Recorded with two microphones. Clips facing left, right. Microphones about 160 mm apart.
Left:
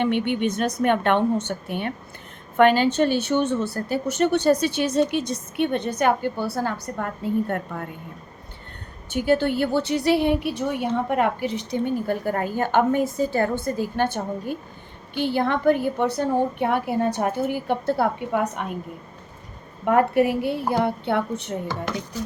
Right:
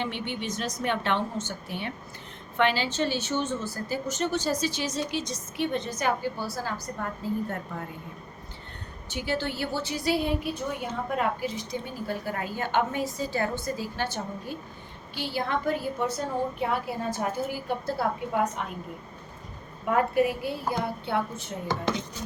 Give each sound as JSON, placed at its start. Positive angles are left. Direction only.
{"t": 0.0, "sound": "a woman's voice", "side_deg": 60}
{"t": 9.0, "sound": "a woman's voice", "side_deg": 50}
{"t": 19.8, "sound": "a woman's voice", "side_deg": 65}